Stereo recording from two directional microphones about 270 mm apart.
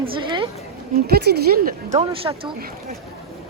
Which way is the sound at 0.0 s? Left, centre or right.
Centre.